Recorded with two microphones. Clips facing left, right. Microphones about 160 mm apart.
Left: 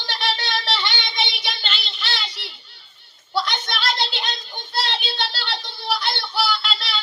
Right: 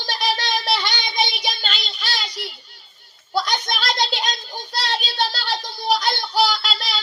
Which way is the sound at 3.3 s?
40° right (ahead or behind).